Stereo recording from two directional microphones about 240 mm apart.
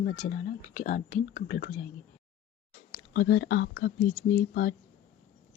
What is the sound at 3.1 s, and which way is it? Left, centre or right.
Speech, left.